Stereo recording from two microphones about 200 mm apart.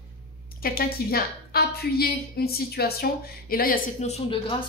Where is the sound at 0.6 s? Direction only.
50° left (ahead or behind).